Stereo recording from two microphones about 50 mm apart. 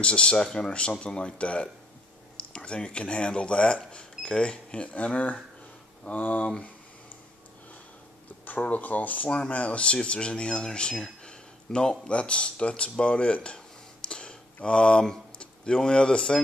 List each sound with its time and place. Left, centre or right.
0.0 s speech: centre; by 6.5 s left
8.5 s speech: left
9.3 s speech: left
14.0 s a sound: centre